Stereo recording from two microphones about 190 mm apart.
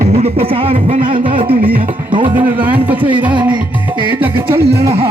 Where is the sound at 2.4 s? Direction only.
10° right (ahead or behind).